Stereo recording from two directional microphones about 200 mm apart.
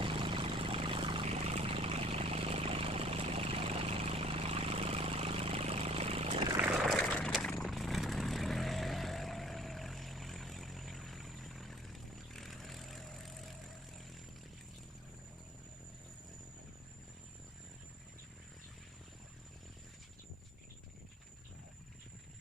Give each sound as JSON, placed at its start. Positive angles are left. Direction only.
{"t": 0.0, "sound": "vehicle", "side_deg": -25}
{"t": 6.6, "sound": "vehicle", "side_deg": -5}